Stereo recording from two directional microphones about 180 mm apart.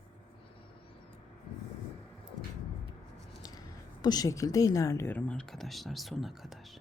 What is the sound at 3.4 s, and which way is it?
A woman's voice, 20° left (ahead or behind).